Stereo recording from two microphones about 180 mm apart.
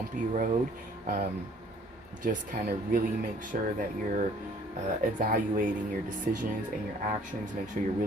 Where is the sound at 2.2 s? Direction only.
50° right (ahead or behind).